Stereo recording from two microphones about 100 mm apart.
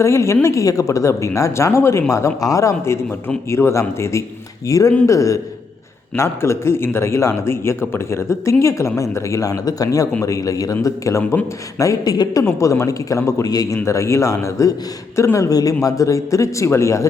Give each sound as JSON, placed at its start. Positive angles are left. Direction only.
{"t": 0.0, "sound": "a man's voice", "side_deg": 30}